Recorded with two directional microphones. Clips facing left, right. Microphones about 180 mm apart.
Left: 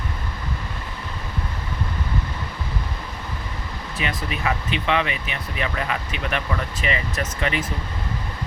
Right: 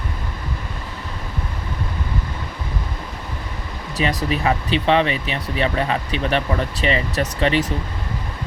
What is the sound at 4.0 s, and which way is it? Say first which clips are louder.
Speech: right 6 dB; 35° right (ahead or behind).